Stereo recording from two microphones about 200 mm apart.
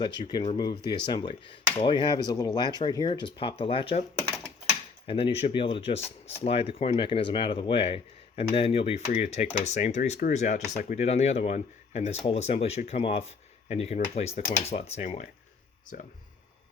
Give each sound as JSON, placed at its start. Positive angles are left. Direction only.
{"t": 0.0, "sound": "speech", "side_deg": 20}
{"t": 5.0, "sound": "speech", "side_deg": 25}